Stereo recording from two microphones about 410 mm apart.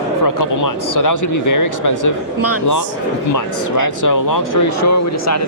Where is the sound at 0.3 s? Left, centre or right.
Left.